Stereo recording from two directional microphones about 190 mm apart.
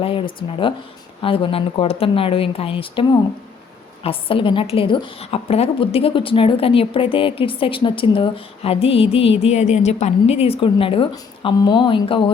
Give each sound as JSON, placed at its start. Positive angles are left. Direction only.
{"t": 0.0, "sound": "a woman's voice", "side_deg": 30}